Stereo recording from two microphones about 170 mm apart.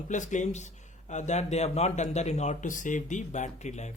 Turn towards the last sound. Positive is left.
turn(degrees=45)  # may be behind; listen again after turning